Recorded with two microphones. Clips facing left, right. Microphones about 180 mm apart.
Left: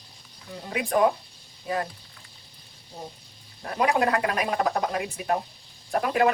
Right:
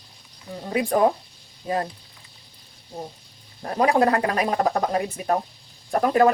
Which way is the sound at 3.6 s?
35° right (ahead or behind).